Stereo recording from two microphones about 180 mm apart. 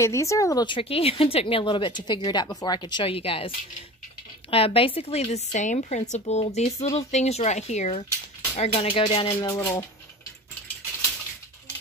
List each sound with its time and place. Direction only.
0.0 s a woman's voice: 15° left (ahead or behind)